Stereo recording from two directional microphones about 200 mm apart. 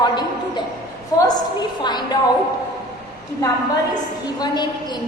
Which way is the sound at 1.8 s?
20° left (ahead or behind).